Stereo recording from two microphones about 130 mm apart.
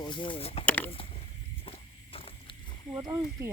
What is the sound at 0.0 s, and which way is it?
Speech, 40° left (ahead or behind).